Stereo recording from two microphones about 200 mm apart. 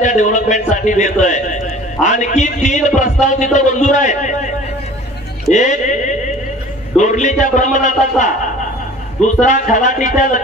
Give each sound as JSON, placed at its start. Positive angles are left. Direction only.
{"t": 0.0, "sound": "a man's voice", "side_deg": 40}
{"t": 5.5, "sound": "a man's voice", "side_deg": 35}
{"t": 9.4, "sound": "a man's voice", "side_deg": 40}